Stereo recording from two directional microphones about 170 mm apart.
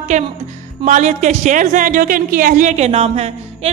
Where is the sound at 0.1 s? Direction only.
45° right (ahead or behind).